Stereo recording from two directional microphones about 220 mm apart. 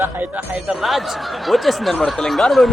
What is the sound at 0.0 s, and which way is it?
Speech, 5° right (ahead or behind).